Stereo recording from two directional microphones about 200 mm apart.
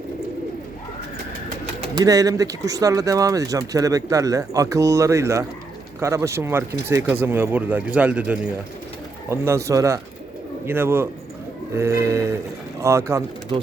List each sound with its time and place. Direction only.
2.0 s speech: 15° right (ahead or behind)